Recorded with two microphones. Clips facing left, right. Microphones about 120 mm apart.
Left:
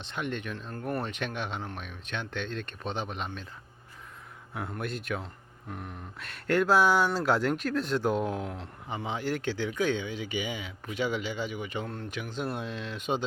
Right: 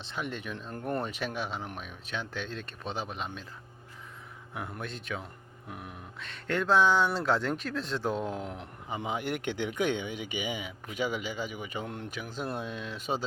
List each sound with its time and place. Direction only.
0.0 s speech: 5° right (ahead or behind)
0.7 s speech: 20° right (ahead or behind)
1.0 s speech: 5° right (ahead or behind)
4.8 s speech: 5° left (ahead or behind)
6.1 s speech: 5° left (ahead or behind)
8.4 s speech: 15° right (ahead or behind)
12.4 s speech: centre (ahead or behind)